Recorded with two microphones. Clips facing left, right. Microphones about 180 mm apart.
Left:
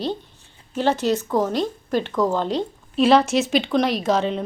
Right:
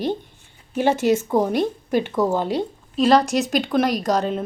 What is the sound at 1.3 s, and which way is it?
A woman's voice, 15° right (ahead or behind).